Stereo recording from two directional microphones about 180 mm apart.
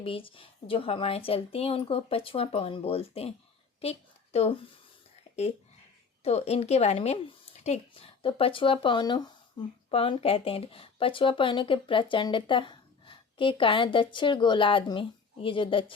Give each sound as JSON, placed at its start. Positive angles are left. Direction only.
{"t": 0.0, "sound": "a woman's voice", "side_deg": 30}
{"t": 6.2, "sound": "speech", "side_deg": 35}